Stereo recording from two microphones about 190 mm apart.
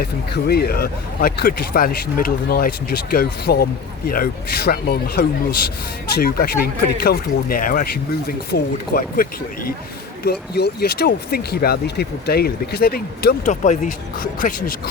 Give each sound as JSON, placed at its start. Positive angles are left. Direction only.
{"t": 0.0, "sound": "speech", "side_deg": 55}
{"t": 10.2, "sound": "speech", "side_deg": 55}